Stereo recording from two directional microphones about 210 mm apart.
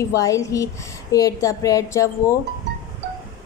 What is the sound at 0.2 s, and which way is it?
A woman's voice, 15° left (ahead or behind).